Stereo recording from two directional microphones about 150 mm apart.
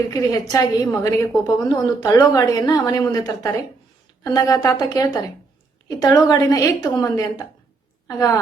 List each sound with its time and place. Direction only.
0.1 s a woman's voice: 25° left (ahead or behind)